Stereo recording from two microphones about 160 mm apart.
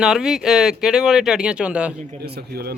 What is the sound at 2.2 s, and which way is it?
Speech, 85° right.